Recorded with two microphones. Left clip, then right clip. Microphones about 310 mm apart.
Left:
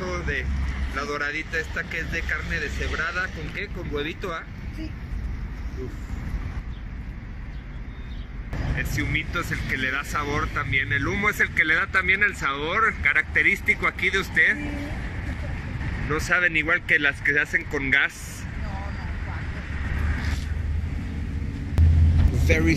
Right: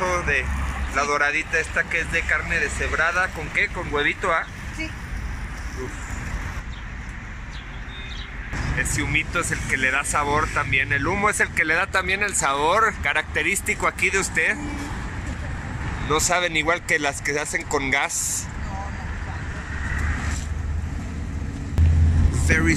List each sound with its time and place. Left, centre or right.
0.1 s vehicle: centre
1.1 s speech: centre
8.7 s speech: centre
16.2 s speech: centre
22.5 s speech: centre